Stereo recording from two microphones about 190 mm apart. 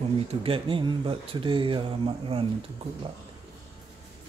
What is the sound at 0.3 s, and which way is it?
Speech, 30° right (ahead or behind).